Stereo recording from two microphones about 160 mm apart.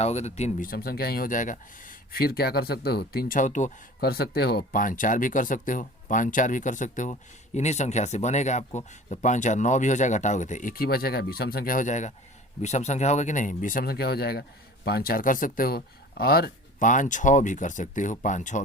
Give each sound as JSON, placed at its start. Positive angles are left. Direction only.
{"t": 0.0, "sound": "speech", "side_deg": 45}
{"t": 0.7, "sound": "speech", "side_deg": 70}
{"t": 4.0, "sound": "speech", "side_deg": 80}
{"t": 16.9, "sound": "speech", "side_deg": 50}